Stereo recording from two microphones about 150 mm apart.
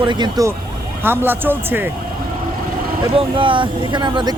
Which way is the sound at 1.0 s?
15° right (ahead or behind).